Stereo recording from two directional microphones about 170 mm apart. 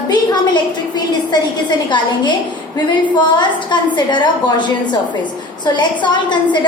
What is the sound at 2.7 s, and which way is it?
A woman's voice, 25° left (ahead or behind).